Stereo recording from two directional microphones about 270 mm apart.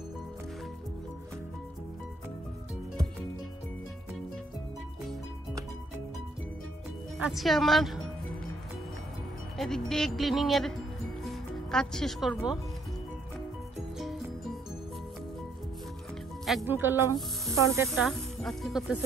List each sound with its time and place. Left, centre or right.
7.2 s speech: centre
9.6 s speech: centre
13.9 s music: centre
16.4 s speech: centre
17.8 s speech: centre